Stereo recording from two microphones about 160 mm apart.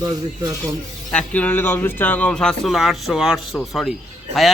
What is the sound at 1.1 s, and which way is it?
Speech, 10° left (ahead or behind).